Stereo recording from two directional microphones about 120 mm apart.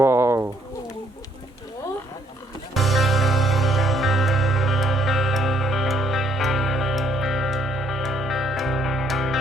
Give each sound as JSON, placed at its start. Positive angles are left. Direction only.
{"t": 0.0, "sound": "pigeon", "side_deg": -20}
{"t": 2.7, "sound": "music", "side_deg": 0}